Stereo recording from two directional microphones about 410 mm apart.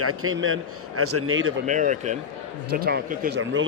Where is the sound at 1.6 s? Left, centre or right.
Centre.